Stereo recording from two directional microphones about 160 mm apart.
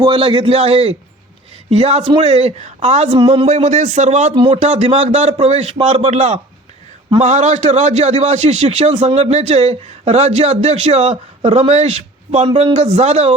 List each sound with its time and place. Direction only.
0.0 s a man's voice: 35° right (ahead or behind)